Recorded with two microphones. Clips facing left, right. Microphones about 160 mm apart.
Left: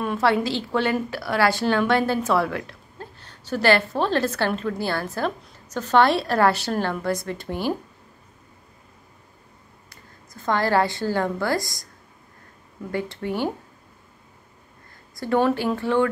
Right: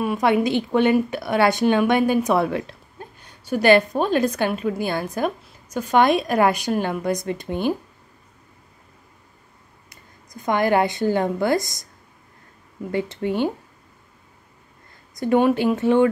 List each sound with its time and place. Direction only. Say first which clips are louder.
0.0 s a woman's voice: right 2 dB; 15° right (ahead or behind)
9.8 s a woman's voice: even; 15° right (ahead or behind)
12.9 s speech: right 4 dB; 20° right (ahead or behind)
15.1 s speech: right 3 dB; 15° right (ahead or behind)